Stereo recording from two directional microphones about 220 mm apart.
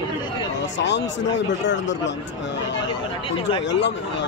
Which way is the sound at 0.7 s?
55° left (ahead or behind).